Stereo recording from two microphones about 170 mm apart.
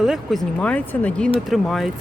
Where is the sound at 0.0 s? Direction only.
Centre (ahead or behind).